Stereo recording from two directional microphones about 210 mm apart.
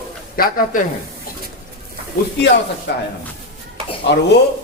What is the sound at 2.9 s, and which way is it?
Speech, 55° left (ahead or behind).